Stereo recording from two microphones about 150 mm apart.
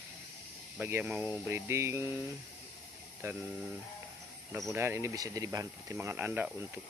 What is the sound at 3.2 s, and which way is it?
Speech, 20° right (ahead or behind).